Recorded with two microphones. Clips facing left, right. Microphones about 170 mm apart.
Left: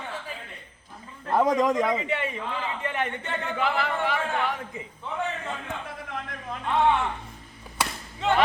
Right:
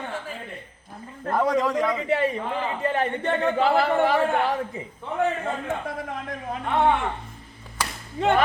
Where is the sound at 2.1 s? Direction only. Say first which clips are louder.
Right 6 dB; 40° right (ahead or behind).